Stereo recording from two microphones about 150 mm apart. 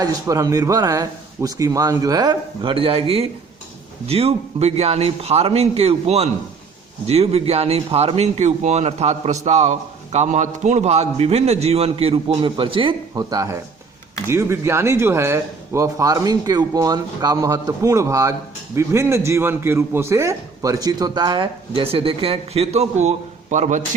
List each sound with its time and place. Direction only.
0.0 s a man's voice: 20° right (ahead or behind); by 23.8 s 55° right (ahead or behind)